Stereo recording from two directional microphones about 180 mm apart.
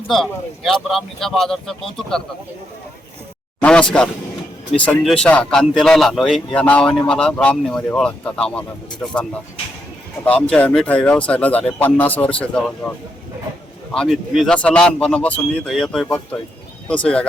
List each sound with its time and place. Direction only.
0.1 s a man's voice: centre (ahead or behind)
3.6 s a man's voice: 5° left (ahead or behind)
10.2 s speech: 5° left (ahead or behind)
13.9 s a man's voice: centre (ahead or behind)